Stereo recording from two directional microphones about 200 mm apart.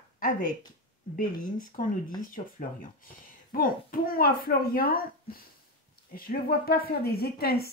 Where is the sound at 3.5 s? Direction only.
45° left (ahead or behind).